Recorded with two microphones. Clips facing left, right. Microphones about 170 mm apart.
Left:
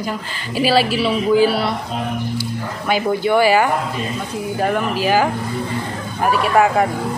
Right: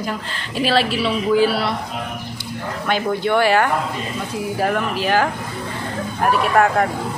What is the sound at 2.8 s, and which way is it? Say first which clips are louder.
Speech: left 2 dB; 5° left (ahead or behind).